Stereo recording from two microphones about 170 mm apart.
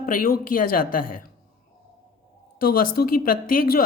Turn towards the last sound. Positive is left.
turn(degrees=60)  # may be behind; listen again after turning